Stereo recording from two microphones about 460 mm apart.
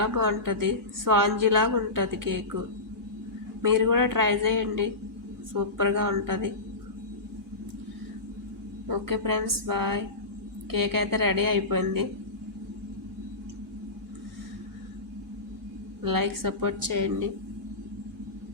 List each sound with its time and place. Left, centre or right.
0.0 s a woman's voice: right
3.6 s a woman's voice: right
8.9 s a woman's voice: right
16.0 s a woman's voice: right